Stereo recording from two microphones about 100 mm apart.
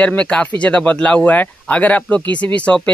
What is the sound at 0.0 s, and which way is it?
Speech, 10° left (ahead or behind).